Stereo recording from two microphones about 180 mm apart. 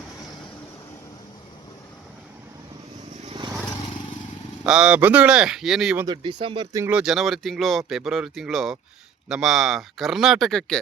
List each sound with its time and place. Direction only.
4.6 s speech: 5° right (ahead or behind)
6.1 s speech: 25° right (ahead or behind)
6.7 s speech: 10° right (ahead or behind)
7.0 s speech: centre (ahead or behind)